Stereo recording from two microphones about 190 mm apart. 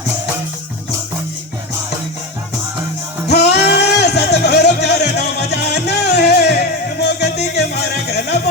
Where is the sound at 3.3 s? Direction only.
60° left (ahead or behind).